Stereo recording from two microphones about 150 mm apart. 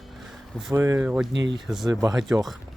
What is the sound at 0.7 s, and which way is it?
Speech, 20° right (ahead or behind).